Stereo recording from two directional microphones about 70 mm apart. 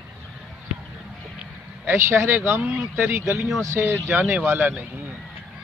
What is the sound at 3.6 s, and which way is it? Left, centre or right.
Speech, right.